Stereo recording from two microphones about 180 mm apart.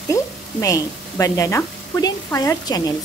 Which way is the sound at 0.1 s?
20° left (ahead or behind).